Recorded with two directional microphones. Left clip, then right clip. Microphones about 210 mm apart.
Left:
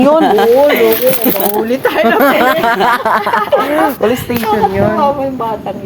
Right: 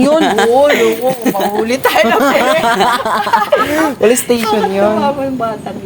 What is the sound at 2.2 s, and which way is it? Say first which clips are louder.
Speech: left 1 dB; 20° left (ahead or behind).